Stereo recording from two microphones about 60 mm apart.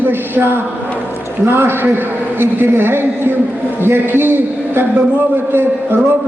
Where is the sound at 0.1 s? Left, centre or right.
Right.